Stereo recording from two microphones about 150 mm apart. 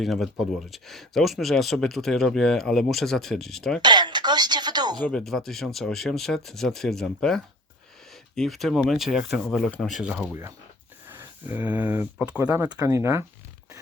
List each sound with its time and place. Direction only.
0.0 s speech: centre (ahead or behind)
3.8 s speech: 30° right (ahead or behind)
4.9 s speech: 5° left (ahead or behind); by 13.2 s 20° right (ahead or behind)